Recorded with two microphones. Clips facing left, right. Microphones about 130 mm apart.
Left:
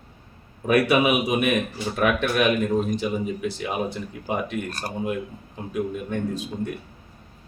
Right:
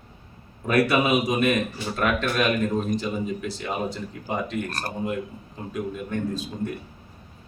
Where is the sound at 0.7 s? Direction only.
15° left (ahead or behind).